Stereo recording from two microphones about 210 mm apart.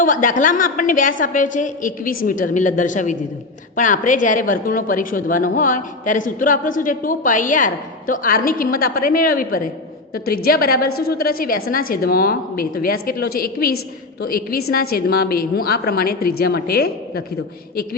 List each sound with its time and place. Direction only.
0.0 s a woman's voice: 40° left (ahead or behind)